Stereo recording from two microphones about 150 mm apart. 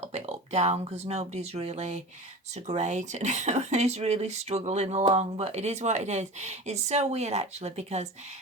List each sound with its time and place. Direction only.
0.0 s speech: 45° right (ahead or behind)